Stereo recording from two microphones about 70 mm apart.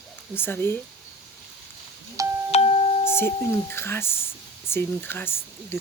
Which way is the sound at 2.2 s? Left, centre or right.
Right.